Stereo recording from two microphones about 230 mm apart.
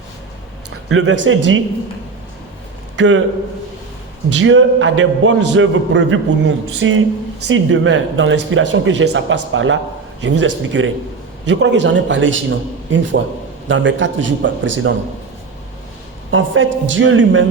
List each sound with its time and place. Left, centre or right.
0.9 s speech: right
2.9 s a man's voice: right
4.4 s a man's voice: right
16.3 s a man's voice: right